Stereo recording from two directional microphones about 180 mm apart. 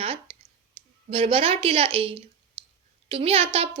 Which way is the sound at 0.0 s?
30° right (ahead or behind).